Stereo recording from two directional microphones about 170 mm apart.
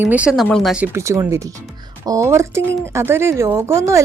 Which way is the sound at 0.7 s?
15° right (ahead or behind).